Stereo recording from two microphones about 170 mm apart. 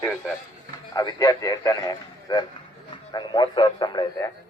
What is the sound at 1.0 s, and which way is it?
A man's voice, 20° left (ahead or behind).